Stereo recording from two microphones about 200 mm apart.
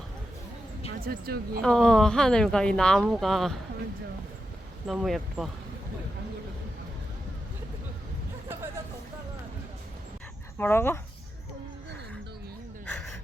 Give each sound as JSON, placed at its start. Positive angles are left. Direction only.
{"t": 1.0, "sound": "speech", "side_deg": -45}
{"t": 1.6, "sound": "speech", "side_deg": 5}
{"t": 4.9, "sound": "speech", "side_deg": 0}
{"t": 10.6, "sound": "speech", "side_deg": 10}
{"t": 12.8, "sound": "a sound", "side_deg": 10}